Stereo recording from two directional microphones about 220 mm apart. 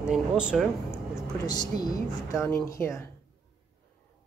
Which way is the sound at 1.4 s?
20° left (ahead or behind).